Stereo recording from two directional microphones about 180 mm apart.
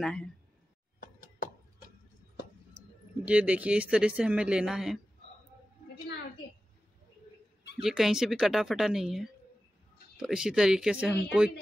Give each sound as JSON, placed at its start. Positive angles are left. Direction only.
{"t": 0.0, "sound": "speech", "side_deg": 5}
{"t": 1.0, "sound": "a sound", "side_deg": 50}
{"t": 3.3, "sound": "speech", "side_deg": -5}
{"t": 7.8, "sound": "speech", "side_deg": 0}